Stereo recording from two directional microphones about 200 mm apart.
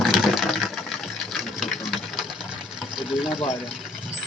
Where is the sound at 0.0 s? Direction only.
Centre (ahead or behind).